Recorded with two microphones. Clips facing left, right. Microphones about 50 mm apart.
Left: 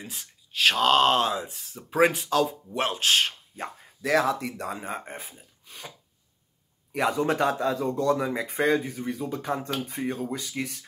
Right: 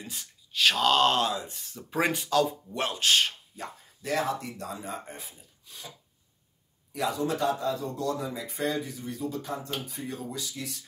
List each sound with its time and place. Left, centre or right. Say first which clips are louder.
0.0 s speech: left 1 dB; centre
4.0 s speech: left 5 dB; left
4.7 s speech: left 3 dB; left
6.9 s a man's voice: left 4 dB; left